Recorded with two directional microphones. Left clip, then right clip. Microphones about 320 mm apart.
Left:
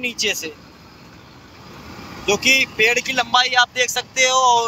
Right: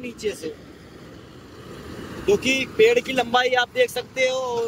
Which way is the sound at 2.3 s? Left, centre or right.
Centre.